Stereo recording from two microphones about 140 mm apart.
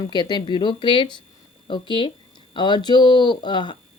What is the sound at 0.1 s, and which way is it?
Speech, 30° left (ahead or behind).